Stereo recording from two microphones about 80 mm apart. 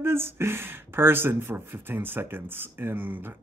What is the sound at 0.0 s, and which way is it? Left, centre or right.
Speech, right.